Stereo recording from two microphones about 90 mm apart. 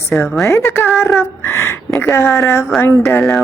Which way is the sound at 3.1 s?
5° left (ahead or behind).